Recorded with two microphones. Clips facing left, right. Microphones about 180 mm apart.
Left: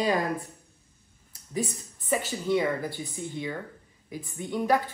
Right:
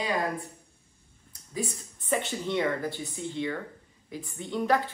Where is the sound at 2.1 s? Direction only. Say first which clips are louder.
Left 3 dB; 5° left (ahead or behind).